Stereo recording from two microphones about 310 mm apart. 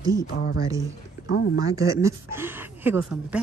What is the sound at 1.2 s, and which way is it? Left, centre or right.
Speech, left.